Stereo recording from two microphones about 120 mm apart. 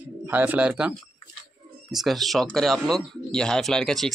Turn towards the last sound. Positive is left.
turn(degrees=5)  # may be behind; listen again after turning